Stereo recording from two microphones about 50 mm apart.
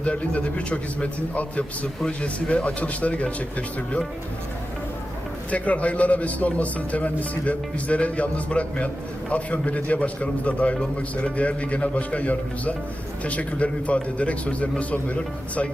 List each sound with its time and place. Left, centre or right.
0.0 s a man's voice: left
5.5 s a man's voice: left